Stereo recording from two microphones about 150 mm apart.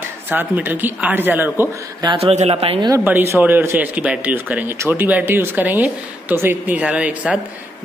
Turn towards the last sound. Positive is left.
turn(degrees=-10)  # may be behind; listen again after turning